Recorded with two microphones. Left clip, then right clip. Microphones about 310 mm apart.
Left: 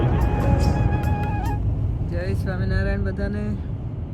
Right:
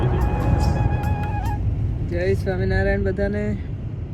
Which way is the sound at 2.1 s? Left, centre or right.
Left.